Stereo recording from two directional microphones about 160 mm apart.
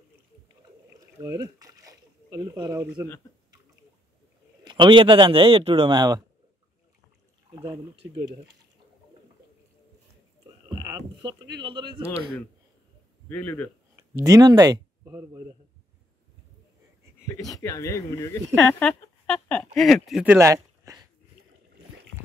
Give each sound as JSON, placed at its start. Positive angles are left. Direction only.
{"t": 0.5, "sound": "rowboat", "side_deg": -20}
{"t": 4.6, "sound": "a man's voice", "side_deg": -30}
{"t": 7.5, "sound": "a man's voice", "side_deg": -30}
{"t": 11.5, "sound": "speech", "side_deg": -30}
{"t": 13.3, "sound": "speech", "side_deg": 10}
{"t": 13.9, "sound": "speech", "side_deg": -20}
{"t": 17.6, "sound": "speech", "side_deg": 20}
{"t": 20.3, "sound": "a sound", "side_deg": -20}